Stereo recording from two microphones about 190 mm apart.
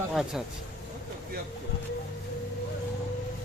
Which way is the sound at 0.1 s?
Centre (ahead or behind).